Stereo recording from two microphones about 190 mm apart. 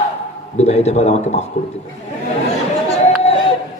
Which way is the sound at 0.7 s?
35° left (ahead or behind).